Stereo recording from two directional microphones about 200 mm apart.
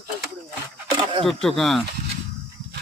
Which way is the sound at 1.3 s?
Centre (ahead or behind).